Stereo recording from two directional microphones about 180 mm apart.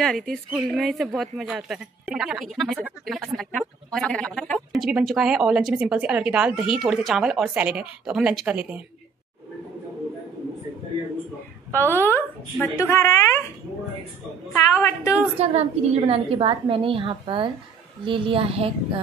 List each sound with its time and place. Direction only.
0.0 s speech: centre (ahead or behind)
11.7 s a woman's voice: 10° left (ahead or behind)
14.5 s a woman's voice: 15° left (ahead or behind)
15.3 s a woman's voice: 35° right (ahead or behind)